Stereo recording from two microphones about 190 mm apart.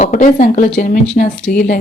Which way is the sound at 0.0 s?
40° left (ahead or behind).